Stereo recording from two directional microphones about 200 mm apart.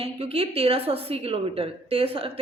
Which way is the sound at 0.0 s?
30° right (ahead or behind).